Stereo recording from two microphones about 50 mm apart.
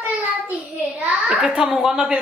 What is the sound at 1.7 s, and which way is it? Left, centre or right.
Speech, centre.